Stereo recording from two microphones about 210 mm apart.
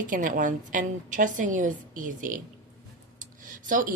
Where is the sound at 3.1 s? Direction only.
40° right (ahead or behind).